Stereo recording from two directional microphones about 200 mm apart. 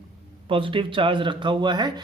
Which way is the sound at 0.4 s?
25° right (ahead or behind).